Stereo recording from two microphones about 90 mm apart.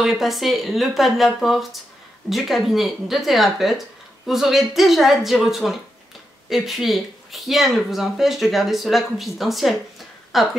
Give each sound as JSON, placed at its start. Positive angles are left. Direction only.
{"t": 0.0, "sound": "speech", "side_deg": 0}